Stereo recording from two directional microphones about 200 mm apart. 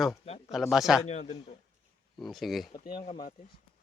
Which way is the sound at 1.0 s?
35° left (ahead or behind).